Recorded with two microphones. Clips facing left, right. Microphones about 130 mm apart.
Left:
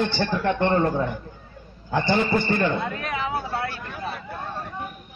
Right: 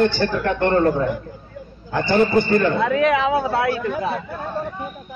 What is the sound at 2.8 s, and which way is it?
Speech, 90° right.